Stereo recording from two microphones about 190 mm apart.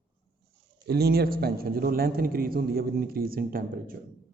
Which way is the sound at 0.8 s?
55° right (ahead or behind).